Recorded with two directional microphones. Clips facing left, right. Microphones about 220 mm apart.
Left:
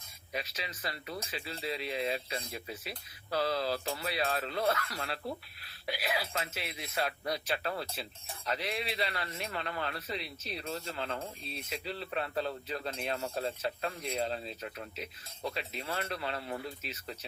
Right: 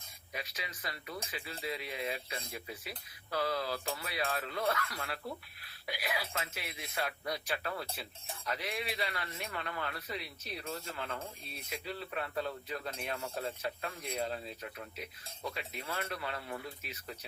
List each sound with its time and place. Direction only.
0.3 s a man's voice: 30° left (ahead or behind)